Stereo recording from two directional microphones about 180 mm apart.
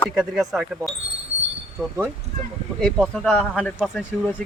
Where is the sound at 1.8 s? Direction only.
10° right (ahead or behind).